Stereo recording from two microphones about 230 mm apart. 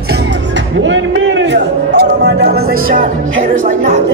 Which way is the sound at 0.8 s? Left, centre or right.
Right.